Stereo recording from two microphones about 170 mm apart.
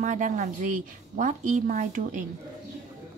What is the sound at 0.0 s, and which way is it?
A woman's voice, 45° right (ahead or behind).